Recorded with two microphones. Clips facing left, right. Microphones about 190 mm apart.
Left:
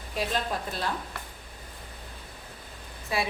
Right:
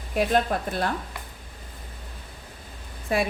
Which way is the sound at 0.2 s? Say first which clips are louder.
Right 7 dB; 55° right (ahead or behind).